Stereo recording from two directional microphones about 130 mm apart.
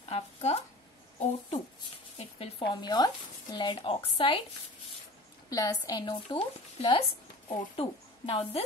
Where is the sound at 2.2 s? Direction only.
45° left (ahead or behind).